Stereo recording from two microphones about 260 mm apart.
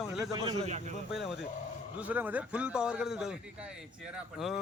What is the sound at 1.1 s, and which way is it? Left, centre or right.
Speech, centre.